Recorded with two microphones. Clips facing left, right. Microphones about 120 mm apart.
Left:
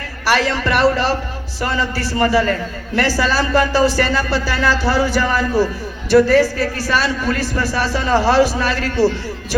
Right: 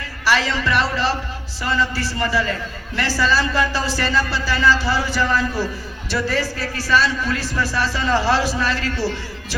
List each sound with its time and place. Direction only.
0.3 s a man's voice: 55° left (ahead or behind)